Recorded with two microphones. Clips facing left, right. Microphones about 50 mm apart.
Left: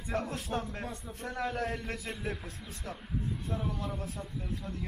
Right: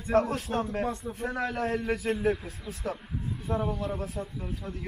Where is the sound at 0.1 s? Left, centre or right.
Right.